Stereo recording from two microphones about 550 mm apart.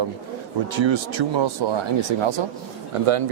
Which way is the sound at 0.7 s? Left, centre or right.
Right.